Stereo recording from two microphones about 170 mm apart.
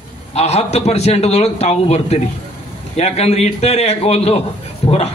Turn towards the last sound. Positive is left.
turn(degrees=35)  # may be behind; listen again after turning